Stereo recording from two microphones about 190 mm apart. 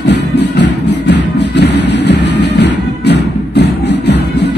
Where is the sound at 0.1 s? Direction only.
65° left (ahead or behind).